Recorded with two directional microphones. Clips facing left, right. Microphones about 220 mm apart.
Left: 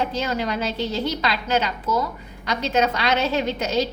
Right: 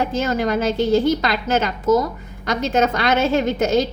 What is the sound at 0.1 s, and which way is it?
A woman's voice, 50° right (ahead or behind).